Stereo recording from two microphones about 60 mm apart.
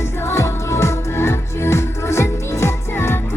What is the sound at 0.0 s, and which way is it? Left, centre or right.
Music, left.